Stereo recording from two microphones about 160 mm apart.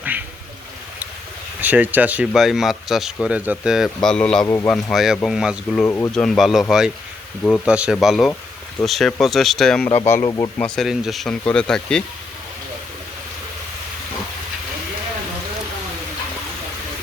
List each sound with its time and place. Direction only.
0.0 s a sound: 10° right (ahead or behind)
1.6 s speech: 10° right (ahead or behind); by 4.4 s 5° left (ahead or behind)
4.4 s speech: 15° left (ahead or behind)
4.7 s speech: centre (ahead or behind)
5.8 s speech: 15° left (ahead or behind)
6.2 s speech: centre (ahead or behind)
7.7 s a man's voice: 5° right (ahead or behind)
10.2 s speech: 25° left (ahead or behind)
10.6 s speech: centre (ahead or behind)